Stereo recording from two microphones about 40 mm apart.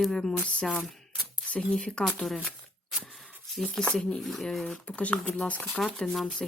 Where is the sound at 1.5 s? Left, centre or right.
Left.